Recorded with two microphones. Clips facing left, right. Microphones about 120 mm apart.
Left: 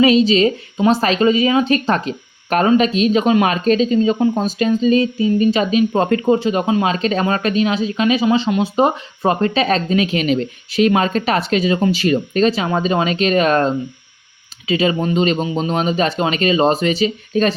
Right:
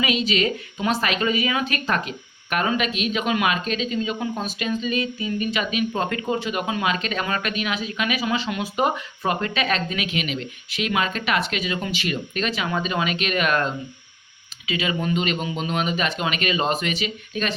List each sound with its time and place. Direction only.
0.0 s speech: 35° left (ahead or behind)